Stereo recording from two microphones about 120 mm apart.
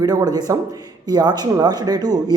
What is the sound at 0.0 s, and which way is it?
Speech, 35° right (ahead or behind).